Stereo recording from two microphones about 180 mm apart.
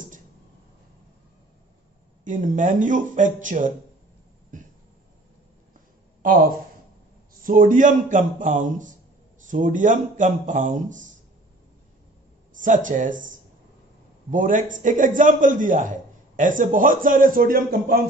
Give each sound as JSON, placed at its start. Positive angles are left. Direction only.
{"t": 2.2, "sound": "a man's voice", "side_deg": -45}
{"t": 6.2, "sound": "a man's voice", "side_deg": -50}
{"t": 12.5, "sound": "a man's voice", "side_deg": -45}
{"t": 14.3, "sound": "a man's voice", "side_deg": -45}